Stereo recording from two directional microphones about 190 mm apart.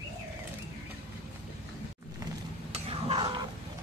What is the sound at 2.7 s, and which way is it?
Stir, 30° right (ahead or behind).